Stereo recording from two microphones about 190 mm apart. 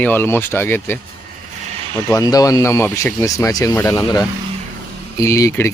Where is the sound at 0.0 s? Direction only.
10° left (ahead or behind).